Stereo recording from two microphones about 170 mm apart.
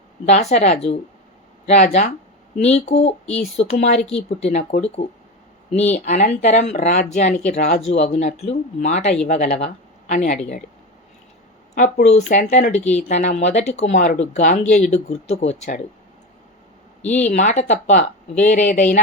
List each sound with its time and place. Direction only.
0.3 s speech: 40° left (ahead or behind)
11.7 s speech: 45° left (ahead or behind)
17.1 s speech: 45° left (ahead or behind)